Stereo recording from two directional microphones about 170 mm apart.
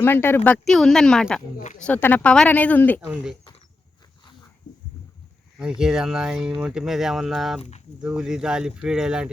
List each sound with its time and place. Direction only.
0.0 s speech: 15° left (ahead or behind)
1.5 s speech: 45° left (ahead or behind)
1.8 s speech: 10° left (ahead or behind)
5.5 s speech: 5° right (ahead or behind)